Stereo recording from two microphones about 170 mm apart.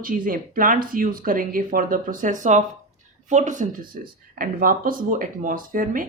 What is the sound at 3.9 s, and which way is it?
Speech, 55° right (ahead or behind).